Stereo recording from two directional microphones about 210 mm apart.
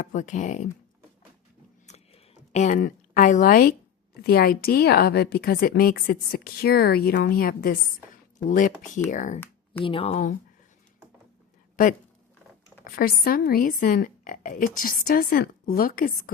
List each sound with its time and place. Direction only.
0.0 s a woman's voice: 35° left (ahead or behind)
1.9 s a sound: 35° left (ahead or behind)
4.2 s a woman's voice: 45° left (ahead or behind); by 10.3 s 30° left (ahead or behind)
12.8 s a woman's voice: 45° left (ahead or behind)